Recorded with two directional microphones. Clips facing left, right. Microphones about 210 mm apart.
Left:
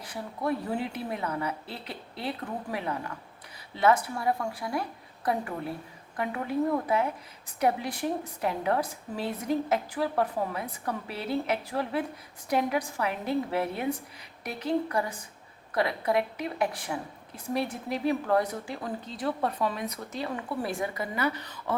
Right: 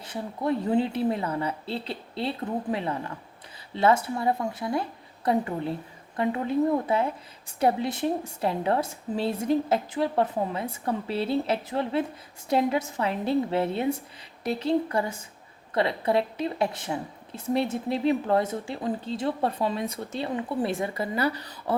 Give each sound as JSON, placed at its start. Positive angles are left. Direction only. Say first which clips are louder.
{"t": 0.0, "sound": "a woman's voice", "louder": "right 3 dB", "side_deg": -25}